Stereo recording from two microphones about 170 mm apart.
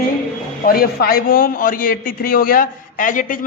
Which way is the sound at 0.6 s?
60° left (ahead or behind).